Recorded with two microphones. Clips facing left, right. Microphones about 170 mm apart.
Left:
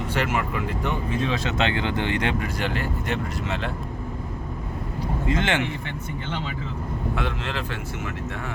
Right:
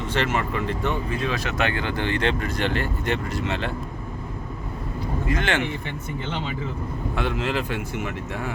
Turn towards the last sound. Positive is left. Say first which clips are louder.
# right 3 dB
turn(degrees=-5)  # may be behind; listen again after turning